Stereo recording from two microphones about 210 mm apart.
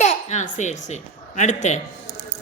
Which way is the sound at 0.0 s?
35° left (ahead or behind).